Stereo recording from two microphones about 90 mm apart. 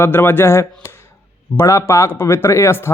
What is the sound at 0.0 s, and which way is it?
A man's voice, 25° left (ahead or behind).